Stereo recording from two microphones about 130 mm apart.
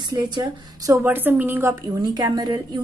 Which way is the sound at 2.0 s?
30° right (ahead or behind).